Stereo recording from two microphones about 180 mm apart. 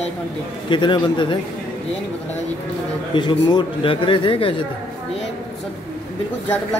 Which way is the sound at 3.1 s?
25° left (ahead or behind).